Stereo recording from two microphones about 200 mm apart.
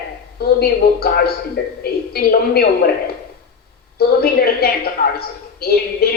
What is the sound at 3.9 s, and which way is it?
A woman's voice, 50° left (ahead or behind).